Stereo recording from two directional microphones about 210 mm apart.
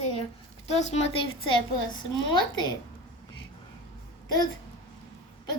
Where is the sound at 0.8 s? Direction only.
30° left (ahead or behind).